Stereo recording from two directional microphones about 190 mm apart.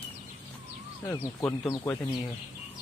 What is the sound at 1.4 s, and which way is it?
Speech, 15° left (ahead or behind).